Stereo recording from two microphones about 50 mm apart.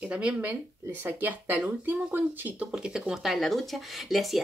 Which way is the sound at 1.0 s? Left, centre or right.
Right.